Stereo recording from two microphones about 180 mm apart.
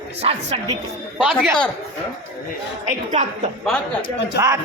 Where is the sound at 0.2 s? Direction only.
35° right (ahead or behind).